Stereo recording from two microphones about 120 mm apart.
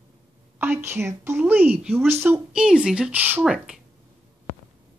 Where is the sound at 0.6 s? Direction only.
20° right (ahead or behind).